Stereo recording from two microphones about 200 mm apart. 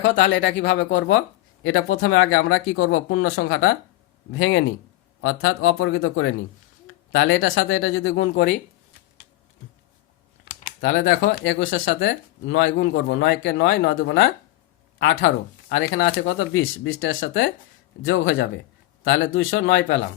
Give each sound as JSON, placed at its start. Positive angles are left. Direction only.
{"t": 0.0, "sound": "speech", "side_deg": 70}
{"t": 0.8, "sound": "speech", "side_deg": 45}
{"t": 1.6, "sound": "speech", "side_deg": 85}
{"t": 7.5, "sound": "speech", "side_deg": 60}
{"t": 10.4, "sound": "speech", "side_deg": 50}
{"t": 11.6, "sound": "speech", "side_deg": 50}
{"t": 19.0, "sound": "speech", "side_deg": 65}